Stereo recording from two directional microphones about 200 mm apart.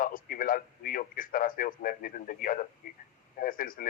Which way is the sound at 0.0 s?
45° left (ahead or behind).